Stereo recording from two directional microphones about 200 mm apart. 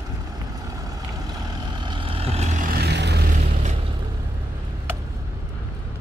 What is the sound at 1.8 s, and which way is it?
Vehicle, 25° right (ahead or behind).